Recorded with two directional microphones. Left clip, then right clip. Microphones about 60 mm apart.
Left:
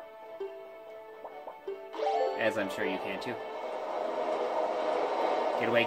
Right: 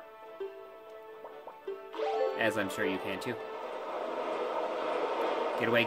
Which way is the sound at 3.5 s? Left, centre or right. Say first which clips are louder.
Left 3 dB; left.